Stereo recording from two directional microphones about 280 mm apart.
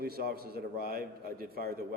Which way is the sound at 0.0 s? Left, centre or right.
Right.